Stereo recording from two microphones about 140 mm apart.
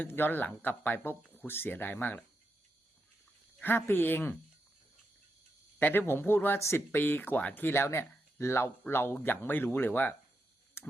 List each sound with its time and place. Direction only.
0.0 s speech: 15° left (ahead or behind)
3.6 s speech: 15° left (ahead or behind)
5.8 s speech: 15° left (ahead or behind)
10.8 s a sound: 15° left (ahead or behind)